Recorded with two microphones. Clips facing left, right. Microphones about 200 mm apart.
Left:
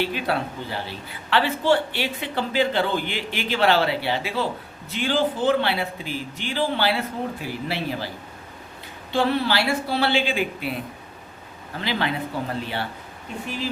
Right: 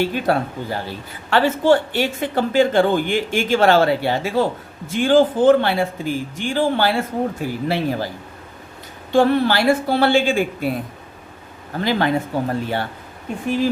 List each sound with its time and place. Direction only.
0.0 s speech: 45° right (ahead or behind)
9.1 s speech: 50° right (ahead or behind)
11.8 s speech: 45° right (ahead or behind)